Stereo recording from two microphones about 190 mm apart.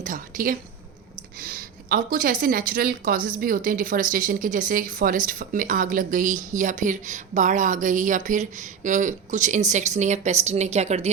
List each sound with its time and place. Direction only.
0.0 s a woman's voice: 45° right (ahead or behind)